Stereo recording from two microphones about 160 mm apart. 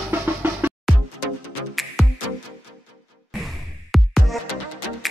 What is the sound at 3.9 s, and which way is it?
Music, centre (ahead or behind).